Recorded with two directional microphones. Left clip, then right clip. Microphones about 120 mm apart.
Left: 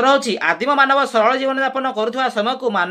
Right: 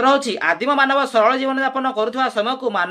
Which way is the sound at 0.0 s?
15° left (ahead or behind).